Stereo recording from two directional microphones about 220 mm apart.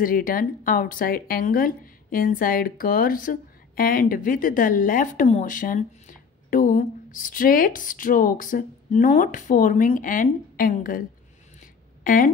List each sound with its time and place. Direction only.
0.0 s a woman's voice: 40° left (ahead or behind)